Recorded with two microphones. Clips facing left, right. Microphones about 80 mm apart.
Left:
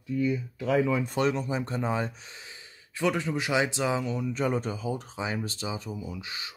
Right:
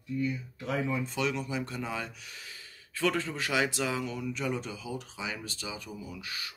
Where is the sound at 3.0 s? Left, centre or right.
Centre.